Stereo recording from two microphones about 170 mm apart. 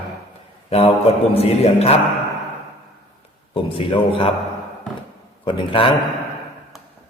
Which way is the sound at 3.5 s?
30° left (ahead or behind).